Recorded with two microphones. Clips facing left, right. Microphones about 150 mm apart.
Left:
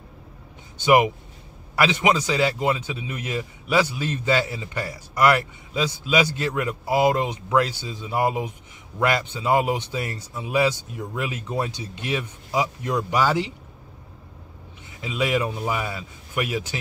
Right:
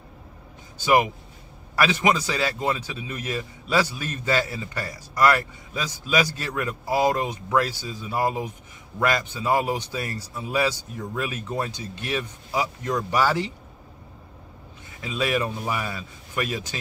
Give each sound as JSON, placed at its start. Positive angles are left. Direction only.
{"t": 0.8, "sound": "a man's voice", "side_deg": 15}
{"t": 15.0, "sound": "a man's voice", "side_deg": 15}